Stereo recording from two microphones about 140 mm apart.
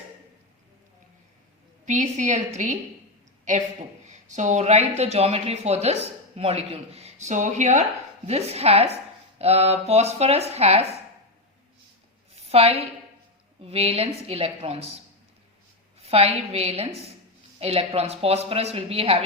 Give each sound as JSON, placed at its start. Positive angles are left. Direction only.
{"t": 1.8, "sound": "a woman's voice", "side_deg": -60}
{"t": 4.0, "sound": "speech", "side_deg": -55}
{"t": 12.4, "sound": "a woman's voice", "side_deg": -45}
{"t": 16.0, "sound": "speech", "side_deg": -45}